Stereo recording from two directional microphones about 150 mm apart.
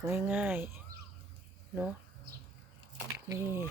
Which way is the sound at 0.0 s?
15° right (ahead or behind).